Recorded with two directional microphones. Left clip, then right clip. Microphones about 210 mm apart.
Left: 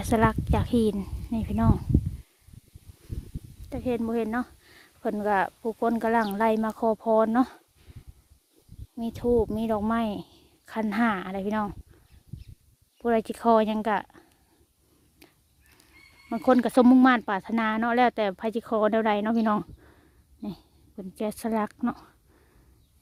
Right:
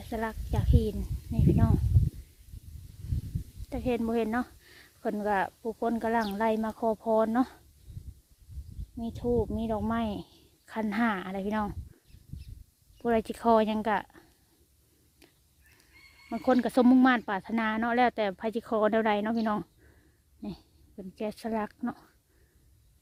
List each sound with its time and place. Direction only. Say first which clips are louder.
0.1 s speech: left 10 dB; 25° left (ahead or behind)
3.7 s speech: left 1 dB; centre (ahead or behind)
9.1 s speech: left 5 dB; 30° left (ahead or behind); by 11.8 s 5° left (ahead or behind)
13.0 s speech: left 3 dB; 10° left (ahead or behind)
15.2 s a sound: left 4 dB; 15° left (ahead or behind)
16.3 s speech: left 4 dB; 20° left (ahead or behind)